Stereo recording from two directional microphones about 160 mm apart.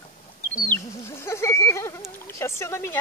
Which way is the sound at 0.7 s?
15° left (ahead or behind).